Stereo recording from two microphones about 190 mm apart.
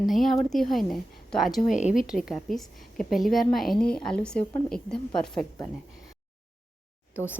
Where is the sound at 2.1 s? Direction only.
Centre (ahead or behind).